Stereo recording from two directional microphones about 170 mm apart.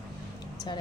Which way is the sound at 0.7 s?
25° left (ahead or behind).